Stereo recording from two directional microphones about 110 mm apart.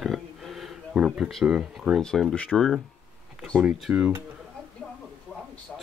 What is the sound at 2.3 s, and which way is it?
Speech, 10° left (ahead or behind).